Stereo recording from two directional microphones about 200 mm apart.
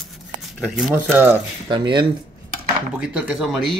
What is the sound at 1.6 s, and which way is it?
Speech, 25° right (ahead or behind).